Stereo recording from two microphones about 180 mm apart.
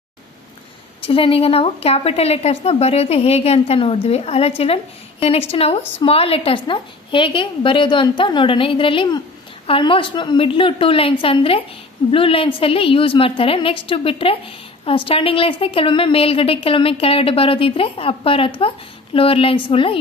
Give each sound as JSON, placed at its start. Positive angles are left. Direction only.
{"t": 1.0, "sound": "a woman's voice", "side_deg": 30}